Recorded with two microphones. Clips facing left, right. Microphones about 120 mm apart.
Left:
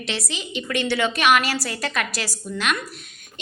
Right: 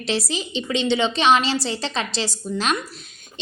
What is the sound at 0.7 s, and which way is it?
A woman's voice, 20° right (ahead or behind).